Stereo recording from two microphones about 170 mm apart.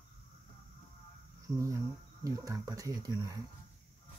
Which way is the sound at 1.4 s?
20° right (ahead or behind).